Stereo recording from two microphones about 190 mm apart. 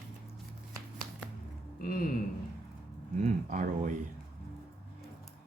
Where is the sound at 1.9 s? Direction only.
50° left (ahead or behind).